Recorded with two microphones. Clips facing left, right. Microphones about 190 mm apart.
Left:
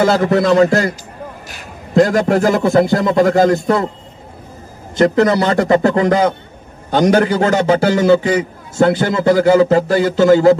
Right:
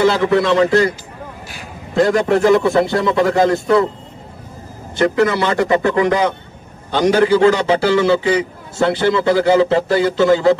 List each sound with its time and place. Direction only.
0.0 s a man's voice: 40° left (ahead or behind)
4.9 s a man's voice: 40° left (ahead or behind)